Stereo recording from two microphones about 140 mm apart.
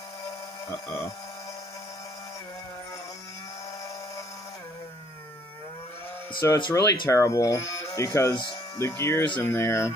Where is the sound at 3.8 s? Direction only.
25° left (ahead or behind).